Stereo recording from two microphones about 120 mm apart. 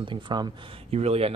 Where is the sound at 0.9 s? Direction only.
60° right (ahead or behind).